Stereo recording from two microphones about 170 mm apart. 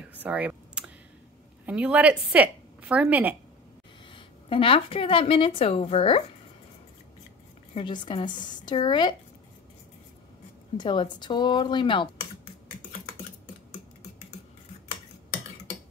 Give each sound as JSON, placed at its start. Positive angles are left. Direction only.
{"t": 0.1, "sound": "computer keyboard", "side_deg": -10}
{"t": 1.7, "sound": "a woman's voice", "side_deg": -10}
{"t": 4.1, "sound": "a woman's voice", "side_deg": 30}
{"t": 7.7, "sound": "speech", "side_deg": 30}
{"t": 10.8, "sound": "speech", "side_deg": 25}